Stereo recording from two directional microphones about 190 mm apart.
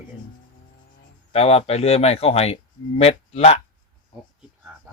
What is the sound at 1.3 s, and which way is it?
Speech, 30° left (ahead or behind).